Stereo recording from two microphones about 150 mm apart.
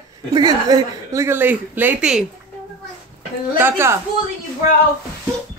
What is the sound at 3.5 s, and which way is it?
Speech, 15° right (ahead or behind).